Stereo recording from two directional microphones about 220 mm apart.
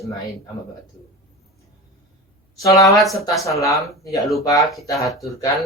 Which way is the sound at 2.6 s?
15° left (ahead or behind).